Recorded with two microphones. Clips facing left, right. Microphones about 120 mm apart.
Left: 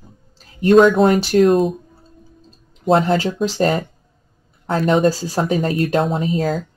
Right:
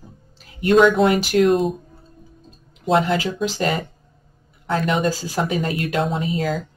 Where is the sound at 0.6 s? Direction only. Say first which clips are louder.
Left 3 dB; 40° left (ahead or behind).